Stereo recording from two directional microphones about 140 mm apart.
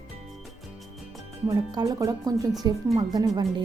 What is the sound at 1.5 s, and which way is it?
Speech, 25° right (ahead or behind).